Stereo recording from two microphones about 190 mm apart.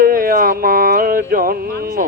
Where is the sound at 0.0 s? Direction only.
50° right (ahead or behind).